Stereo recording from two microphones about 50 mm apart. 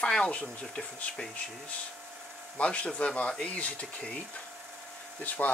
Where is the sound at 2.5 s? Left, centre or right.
Left.